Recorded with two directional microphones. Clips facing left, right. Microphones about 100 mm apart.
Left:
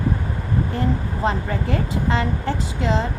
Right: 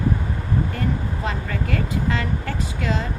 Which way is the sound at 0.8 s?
30° left (ahead or behind).